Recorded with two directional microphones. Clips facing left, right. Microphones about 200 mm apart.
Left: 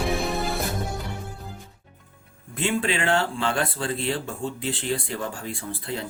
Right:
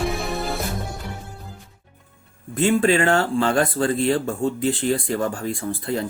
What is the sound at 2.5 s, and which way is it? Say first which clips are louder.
Speech: right 8 dB; 45° right (ahead or behind).